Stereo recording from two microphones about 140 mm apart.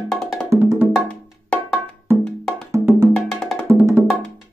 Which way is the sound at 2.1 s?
20° right (ahead or behind).